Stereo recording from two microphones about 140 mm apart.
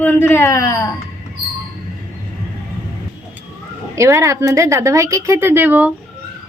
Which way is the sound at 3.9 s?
20° right (ahead or behind).